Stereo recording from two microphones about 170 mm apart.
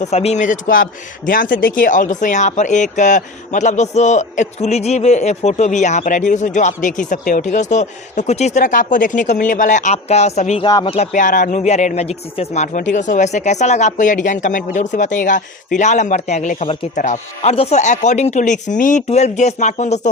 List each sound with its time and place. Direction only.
0.0 s speech: 40° left (ahead or behind)
10.6 s speech: 20° left (ahead or behind)
10.8 s speech: 35° left (ahead or behind)
11.1 s speech: 50° left (ahead or behind)